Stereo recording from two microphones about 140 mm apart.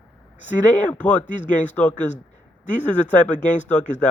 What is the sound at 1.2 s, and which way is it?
Speech, 60° left (ahead or behind).